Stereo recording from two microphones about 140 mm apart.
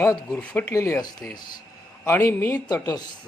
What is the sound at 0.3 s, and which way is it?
Speech, 10° left (ahead or behind).